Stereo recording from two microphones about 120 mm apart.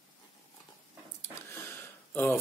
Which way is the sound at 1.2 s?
20° left (ahead or behind).